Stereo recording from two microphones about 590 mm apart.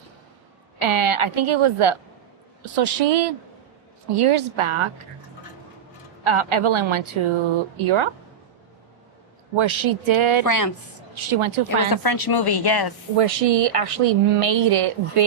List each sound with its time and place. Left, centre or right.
0.8 s a woman's voice: right
6.2 s a woman's voice: right
9.6 s a woman's voice: right
10.4 s speech: left
11.1 s a woman's voice: right
11.9 s speech: left
13.1 s a woman's voice: right